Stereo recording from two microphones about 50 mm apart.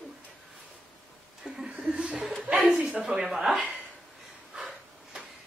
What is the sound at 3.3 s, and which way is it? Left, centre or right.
Speech, centre.